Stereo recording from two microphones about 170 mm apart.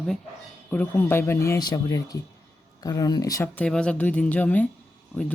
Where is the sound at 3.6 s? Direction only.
5° left (ahead or behind).